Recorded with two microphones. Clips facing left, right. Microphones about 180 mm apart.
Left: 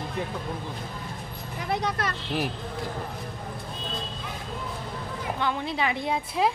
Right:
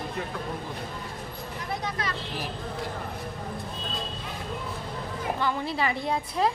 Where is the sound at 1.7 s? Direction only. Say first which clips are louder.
Left 5 dB; 70° left (ahead or behind).